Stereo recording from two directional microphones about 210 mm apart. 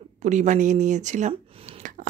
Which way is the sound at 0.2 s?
35° right (ahead or behind).